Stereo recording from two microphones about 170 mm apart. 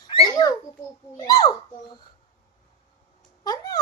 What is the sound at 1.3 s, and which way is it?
Speech, 25° left (ahead or behind).